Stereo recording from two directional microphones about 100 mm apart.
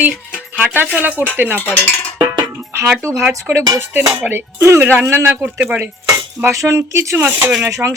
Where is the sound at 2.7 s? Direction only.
25° right (ahead or behind).